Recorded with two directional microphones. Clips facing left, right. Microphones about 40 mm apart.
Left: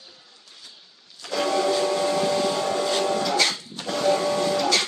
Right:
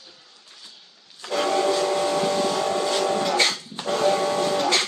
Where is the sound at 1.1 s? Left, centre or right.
Right.